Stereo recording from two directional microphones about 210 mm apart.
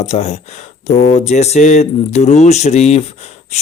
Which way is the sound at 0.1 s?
30° left (ahead or behind).